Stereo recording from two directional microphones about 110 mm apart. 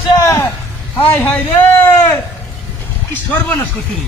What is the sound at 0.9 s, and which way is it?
A man's voice, 15° left (ahead or behind).